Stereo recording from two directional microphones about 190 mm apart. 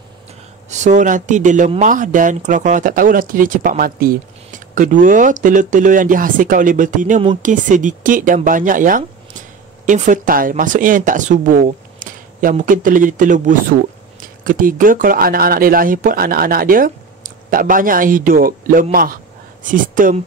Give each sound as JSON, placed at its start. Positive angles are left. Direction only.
{"t": 0.7, "sound": "speech", "side_deg": -40}